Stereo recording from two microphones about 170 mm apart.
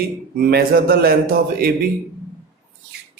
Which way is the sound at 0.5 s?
65° right (ahead or behind).